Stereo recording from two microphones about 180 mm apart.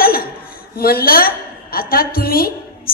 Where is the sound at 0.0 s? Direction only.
55° left (ahead or behind).